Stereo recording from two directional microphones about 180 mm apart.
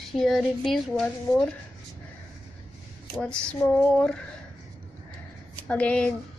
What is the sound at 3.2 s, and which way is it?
Speech, 5° left (ahead or behind).